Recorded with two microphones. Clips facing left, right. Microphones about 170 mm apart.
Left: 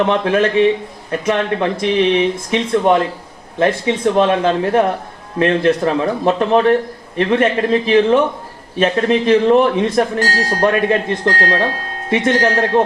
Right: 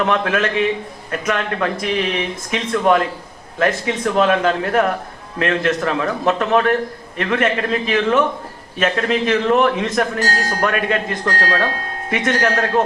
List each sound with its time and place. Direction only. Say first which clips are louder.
0.0 s a man's voice: left 4 dB; 30° left (ahead or behind)